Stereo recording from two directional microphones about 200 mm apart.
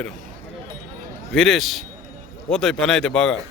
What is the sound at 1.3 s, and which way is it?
A man's voice, centre (ahead or behind).